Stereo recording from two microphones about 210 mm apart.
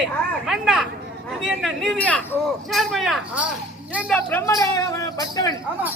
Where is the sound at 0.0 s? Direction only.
Centre (ahead or behind).